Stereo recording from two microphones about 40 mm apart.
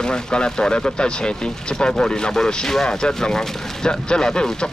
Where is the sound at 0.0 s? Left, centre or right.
Centre.